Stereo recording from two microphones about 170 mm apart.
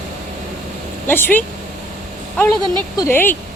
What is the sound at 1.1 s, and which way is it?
Speech, 10° left (ahead or behind).